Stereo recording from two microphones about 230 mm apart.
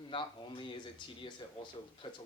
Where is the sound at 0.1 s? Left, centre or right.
Left.